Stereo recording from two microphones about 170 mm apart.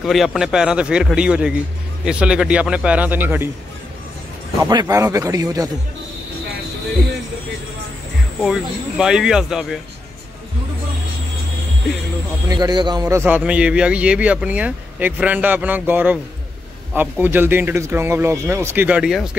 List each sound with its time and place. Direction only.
0.0 s a man's voice: centre (ahead or behind)
4.6 s speech: 20° right (ahead or behind)
8.5 s a man's voice: 5° right (ahead or behind)
12.4 s a man's voice: 25° right (ahead or behind); by 19.3 s 5° right (ahead or behind)